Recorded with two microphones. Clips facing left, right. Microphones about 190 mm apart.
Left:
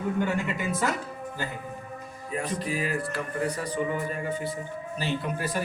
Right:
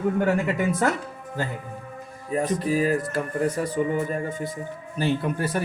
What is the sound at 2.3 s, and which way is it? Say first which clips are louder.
Speech: right 7 dB; 40° right (ahead or behind).